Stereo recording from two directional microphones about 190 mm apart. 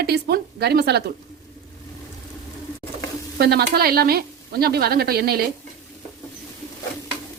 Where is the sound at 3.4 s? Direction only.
55° right (ahead or behind).